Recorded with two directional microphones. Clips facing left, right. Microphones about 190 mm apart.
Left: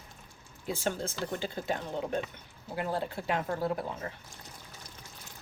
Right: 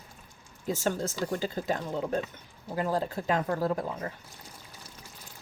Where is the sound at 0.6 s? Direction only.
40° right (ahead or behind).